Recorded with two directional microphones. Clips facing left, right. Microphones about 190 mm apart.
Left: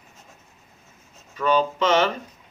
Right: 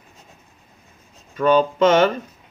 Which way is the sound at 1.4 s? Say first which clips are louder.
Right 6 dB; 50° right (ahead or behind).